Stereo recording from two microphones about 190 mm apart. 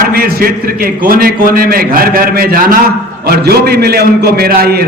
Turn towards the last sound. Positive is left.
turn(degrees=-55)  # may be behind; listen again after turning